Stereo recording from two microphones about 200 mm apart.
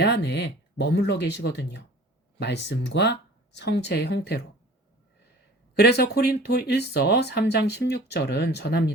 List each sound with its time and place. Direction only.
0.0 s speech: 55° left (ahead or behind)
5.7 s speech: 55° left (ahead or behind)